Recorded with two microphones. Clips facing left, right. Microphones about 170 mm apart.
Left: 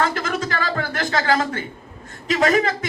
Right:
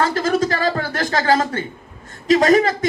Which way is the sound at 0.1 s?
35° right (ahead or behind).